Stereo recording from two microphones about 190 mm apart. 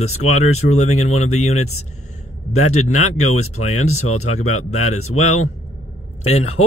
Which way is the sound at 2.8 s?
35° left (ahead or behind).